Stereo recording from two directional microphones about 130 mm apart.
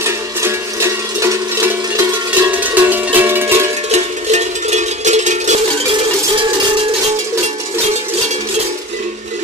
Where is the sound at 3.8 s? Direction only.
60° right (ahead or behind).